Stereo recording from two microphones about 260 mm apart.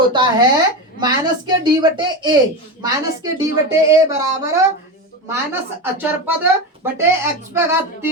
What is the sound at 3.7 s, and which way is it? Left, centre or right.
Speech, centre.